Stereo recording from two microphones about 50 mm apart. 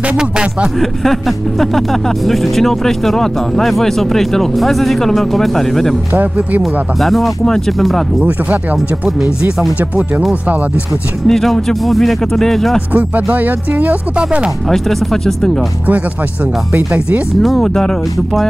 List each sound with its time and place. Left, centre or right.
0.2 s speech: centre
0.7 s speech: centre
6.1 s speech: right
6.6 s speech: centre
7.4 s speech: centre
8.2 s speech: right
9.8 s speech: right
11.2 s speech: centre
12.9 s speech: right
14.1 s speech: right
14.7 s speech: centre
16.7 s speech: right
17.4 s speech: centre